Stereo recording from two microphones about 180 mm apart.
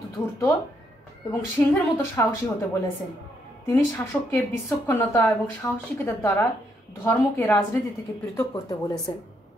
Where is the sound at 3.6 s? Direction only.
15° left (ahead or behind).